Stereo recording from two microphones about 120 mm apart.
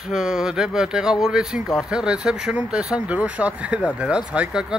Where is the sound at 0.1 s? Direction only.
5° right (ahead or behind).